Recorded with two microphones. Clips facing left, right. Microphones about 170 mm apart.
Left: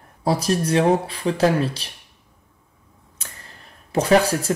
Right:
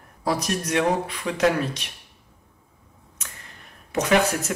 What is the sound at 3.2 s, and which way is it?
Mechanisms, 30° left (ahead or behind).